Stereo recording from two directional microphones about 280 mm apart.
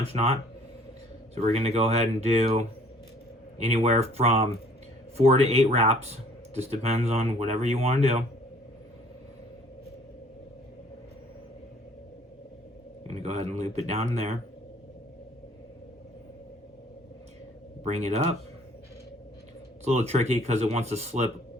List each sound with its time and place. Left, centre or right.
0.1 s speech: right
1.4 s speech: right
13.1 s speech: right
17.8 s speech: right
19.8 s speech: right